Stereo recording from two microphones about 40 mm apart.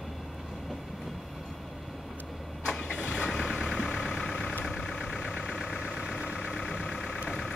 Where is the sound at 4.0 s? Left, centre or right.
Centre.